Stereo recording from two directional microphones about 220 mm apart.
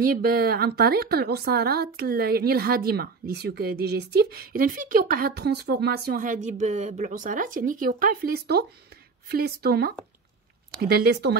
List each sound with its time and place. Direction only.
0.0 s a woman's voice: 45° right (ahead or behind)